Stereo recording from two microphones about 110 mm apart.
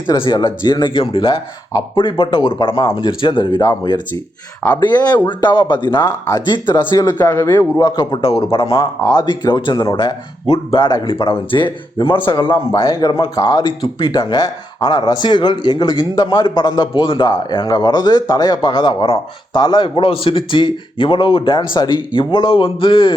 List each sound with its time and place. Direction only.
0.2 s speech: 40° left (ahead or behind)
3.6 s speech: 35° left (ahead or behind)
7.3 s a man's voice: 25° left (ahead or behind)
7.8 s speech: 40° left (ahead or behind)
8.2 s speech: 60° left (ahead or behind)
9.1 s speech: 45° left (ahead or behind)
10.4 s speech: 60° left (ahead or behind)